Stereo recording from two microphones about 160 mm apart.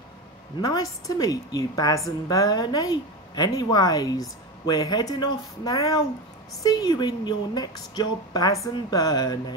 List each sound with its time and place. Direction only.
0.6 s a woman's voice: 25° left (ahead or behind)